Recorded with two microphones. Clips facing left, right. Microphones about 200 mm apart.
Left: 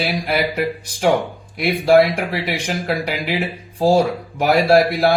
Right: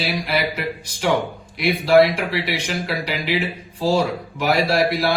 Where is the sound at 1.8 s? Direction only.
50° left (ahead or behind).